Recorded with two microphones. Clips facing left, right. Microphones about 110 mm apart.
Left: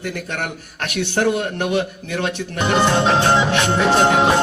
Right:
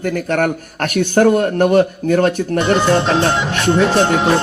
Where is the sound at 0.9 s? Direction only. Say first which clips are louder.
Right 7 dB; 45° right (ahead or behind).